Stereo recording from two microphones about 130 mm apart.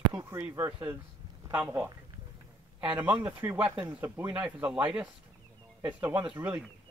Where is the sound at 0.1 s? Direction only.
20° right (ahead or behind).